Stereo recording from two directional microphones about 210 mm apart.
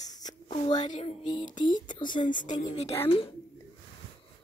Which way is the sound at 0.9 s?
35° left (ahead or behind).